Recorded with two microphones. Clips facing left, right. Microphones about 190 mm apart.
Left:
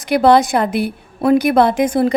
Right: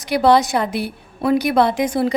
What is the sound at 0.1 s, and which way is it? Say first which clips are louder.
A woman's voice: left 3 dB; 55° left (ahead or behind).